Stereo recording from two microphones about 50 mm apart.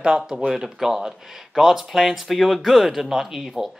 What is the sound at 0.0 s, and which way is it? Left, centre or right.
Speech, centre.